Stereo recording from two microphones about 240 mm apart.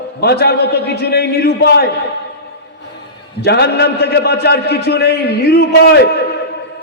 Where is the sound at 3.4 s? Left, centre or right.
Left.